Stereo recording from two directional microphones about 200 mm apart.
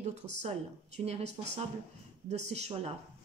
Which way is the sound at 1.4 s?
30° right (ahead or behind).